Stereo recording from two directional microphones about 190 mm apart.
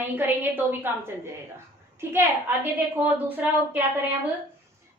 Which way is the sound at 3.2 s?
10° right (ahead or behind).